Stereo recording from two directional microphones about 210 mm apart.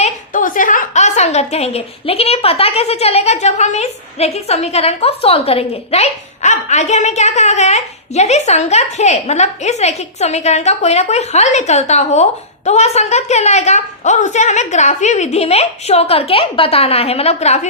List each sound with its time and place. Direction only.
0.0 s a woman's voice: 40° left (ahead or behind)